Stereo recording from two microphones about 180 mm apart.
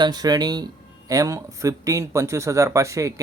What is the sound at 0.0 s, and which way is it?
Speech, 20° right (ahead or behind).